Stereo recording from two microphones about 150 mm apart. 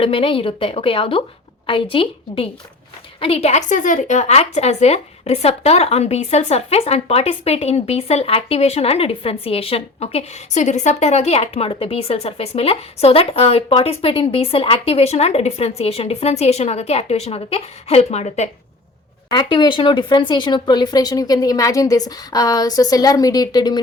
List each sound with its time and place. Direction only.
0.0 s a woman's voice: 40° left (ahead or behind)
19.3 s speech: 30° left (ahead or behind)